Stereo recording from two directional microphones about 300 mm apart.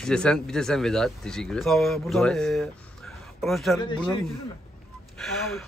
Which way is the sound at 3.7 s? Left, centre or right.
Centre.